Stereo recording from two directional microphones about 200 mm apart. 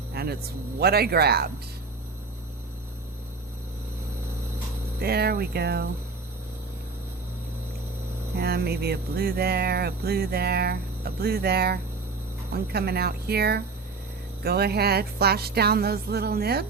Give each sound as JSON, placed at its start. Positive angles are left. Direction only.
{"t": 0.1, "sound": "music", "side_deg": -50}
{"t": 0.8, "sound": "speech", "side_deg": -50}
{"t": 4.9, "sound": "speech", "side_deg": -50}
{"t": 8.4, "sound": "speech", "side_deg": -50}